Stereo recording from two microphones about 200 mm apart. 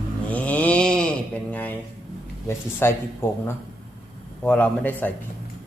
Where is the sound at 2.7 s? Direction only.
10° left (ahead or behind).